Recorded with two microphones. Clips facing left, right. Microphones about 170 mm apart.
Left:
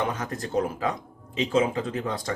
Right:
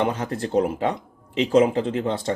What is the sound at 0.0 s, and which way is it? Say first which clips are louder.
Speech: right 5 dB; 30° right (ahead or behind).